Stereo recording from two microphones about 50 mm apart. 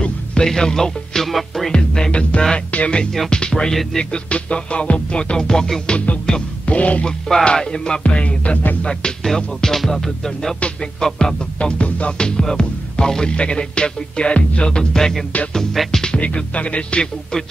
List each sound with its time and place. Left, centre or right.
0.0 s music: centre
1.7 s music: centre
7.1 s music: centre
8.8 s music: centre
16.0 s music: centre